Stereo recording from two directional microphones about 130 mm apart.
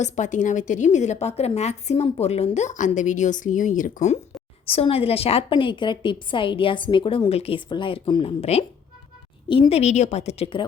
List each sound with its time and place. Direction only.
0.0 s a woman's voice: 70° left (ahead or behind)
4.7 s a woman's voice: 50° left (ahead or behind)
7.7 s a woman's voice: 40° left (ahead or behind)